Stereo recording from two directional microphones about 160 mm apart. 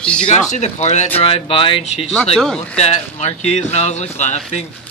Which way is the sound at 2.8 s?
45° left (ahead or behind).